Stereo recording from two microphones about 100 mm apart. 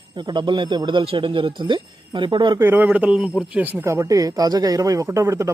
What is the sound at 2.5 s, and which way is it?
Speech, 20° right (ahead or behind).